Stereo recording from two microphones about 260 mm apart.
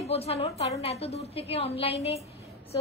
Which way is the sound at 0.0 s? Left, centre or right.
Left.